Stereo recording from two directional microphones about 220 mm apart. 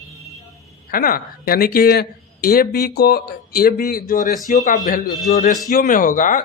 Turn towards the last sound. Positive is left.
turn(degrees=35)  # may be behind; listen again after turning